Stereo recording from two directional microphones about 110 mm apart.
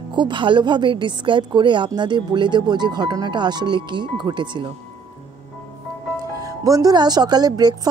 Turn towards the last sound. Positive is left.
turn(degrees=-40)  # may be behind; listen again after turning